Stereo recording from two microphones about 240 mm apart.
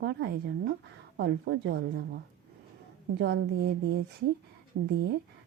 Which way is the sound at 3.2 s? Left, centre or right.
Right.